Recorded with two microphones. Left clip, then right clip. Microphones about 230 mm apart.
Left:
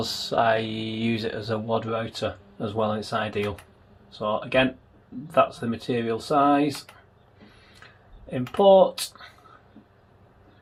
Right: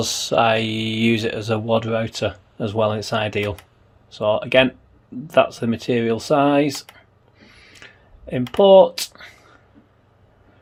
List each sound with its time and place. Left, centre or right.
0.0 s speech: right
8.5 s speech: right